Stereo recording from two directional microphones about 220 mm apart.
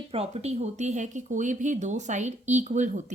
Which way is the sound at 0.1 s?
30° right (ahead or behind).